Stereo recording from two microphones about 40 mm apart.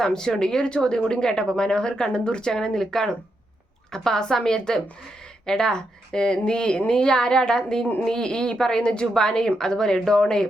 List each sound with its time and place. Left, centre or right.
0.0 s speech: centre